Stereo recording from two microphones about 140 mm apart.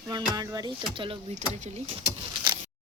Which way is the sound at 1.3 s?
55° right (ahead or behind).